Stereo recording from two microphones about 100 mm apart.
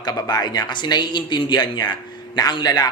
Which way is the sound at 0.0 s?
40° left (ahead or behind).